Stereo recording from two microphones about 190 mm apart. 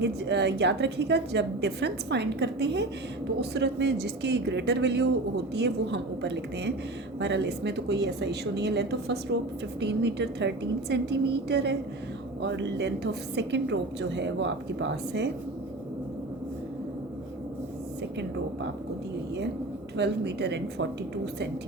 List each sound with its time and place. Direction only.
0.0 s a woman's voice: 65° right (ahead or behind)
20.0 s a woman's voice: 65° right (ahead or behind)